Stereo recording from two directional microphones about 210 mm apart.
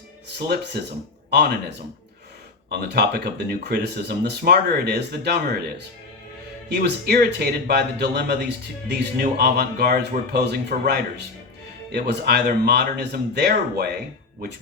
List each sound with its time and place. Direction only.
0.3 s speech: 50° right (ahead or behind)
2.6 s speech: 50° right (ahead or behind)